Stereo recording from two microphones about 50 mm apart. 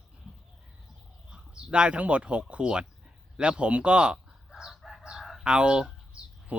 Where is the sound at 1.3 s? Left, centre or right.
Centre.